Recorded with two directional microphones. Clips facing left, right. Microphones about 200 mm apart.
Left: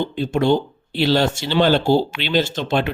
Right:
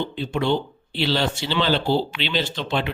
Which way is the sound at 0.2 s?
45° left (ahead or behind).